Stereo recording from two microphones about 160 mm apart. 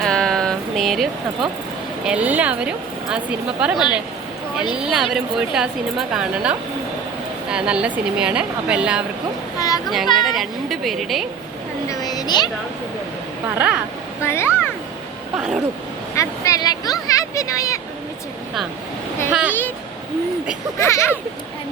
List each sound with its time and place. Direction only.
0.0 s a sound: 5° left (ahead or behind)
2.0 s a woman's voice: 10° right (ahead or behind)
9.6 s a sound: 25° left (ahead or behind)
10.2 s a woman's voice: centre (ahead or behind)
11.9 s a sound: 25° left (ahead or behind)
14.2 s speech: 15° left (ahead or behind)
15.4 s a woman's voice: 5° right (ahead or behind)
16.1 s speech: 20° left (ahead or behind)
19.3 s a woman's voice: 10° right (ahead or behind)
20.7 s speech: 15° left (ahead or behind)